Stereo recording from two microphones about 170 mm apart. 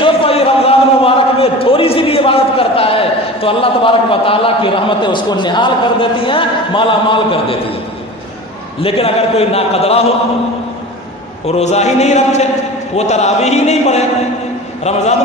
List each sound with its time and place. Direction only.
0.0 s a sound: 35° left (ahead or behind)
8.8 s a man's voice: 35° left (ahead or behind)
11.4 s a man's voice: 40° left (ahead or behind)